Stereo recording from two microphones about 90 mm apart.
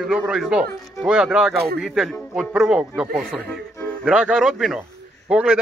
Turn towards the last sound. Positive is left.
turn(degrees=-10)  # may be behind; listen again after turning